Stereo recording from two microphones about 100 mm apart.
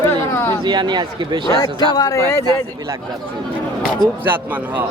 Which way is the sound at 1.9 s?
45° left (ahead or behind).